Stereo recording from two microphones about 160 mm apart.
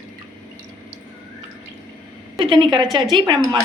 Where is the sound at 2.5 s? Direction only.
30° right (ahead or behind).